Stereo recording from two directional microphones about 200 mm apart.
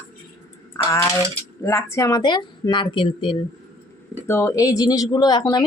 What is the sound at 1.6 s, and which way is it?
Speech, 15° left (ahead or behind).